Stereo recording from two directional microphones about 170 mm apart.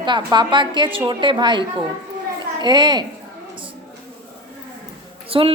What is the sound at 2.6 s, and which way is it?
Speech, 25° right (ahead or behind).